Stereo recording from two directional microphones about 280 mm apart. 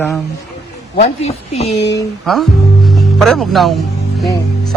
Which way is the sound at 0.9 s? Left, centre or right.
Left.